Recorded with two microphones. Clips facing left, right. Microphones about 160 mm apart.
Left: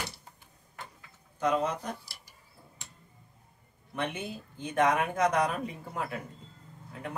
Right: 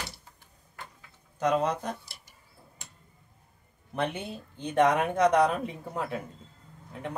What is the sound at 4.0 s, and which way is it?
Speech, 30° right (ahead or behind).